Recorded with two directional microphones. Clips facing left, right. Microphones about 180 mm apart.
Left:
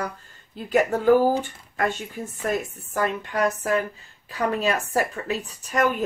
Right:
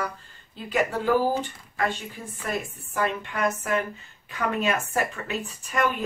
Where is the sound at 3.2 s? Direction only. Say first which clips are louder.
Left 3 dB; 35° left (ahead or behind).